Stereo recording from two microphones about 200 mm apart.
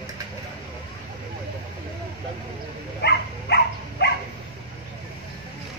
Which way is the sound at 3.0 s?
55° left (ahead or behind).